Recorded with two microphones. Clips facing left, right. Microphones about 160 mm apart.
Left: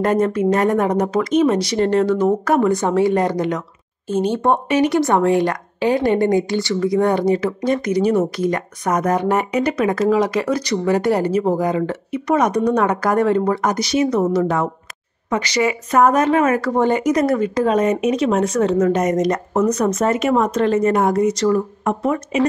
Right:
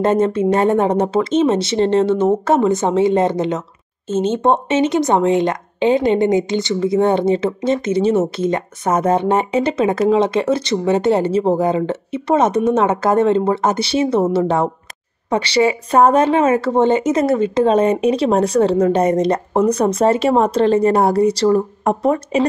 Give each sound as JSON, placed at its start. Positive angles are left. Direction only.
{"t": 0.0, "sound": "speech", "side_deg": -25}